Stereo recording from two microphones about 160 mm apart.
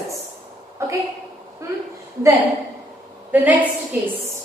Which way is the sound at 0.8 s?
20° right (ahead or behind).